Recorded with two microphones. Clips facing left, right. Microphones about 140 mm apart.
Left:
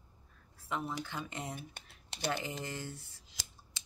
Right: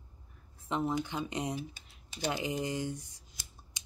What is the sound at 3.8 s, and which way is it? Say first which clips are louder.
Scissors: even; 15° right (ahead or behind).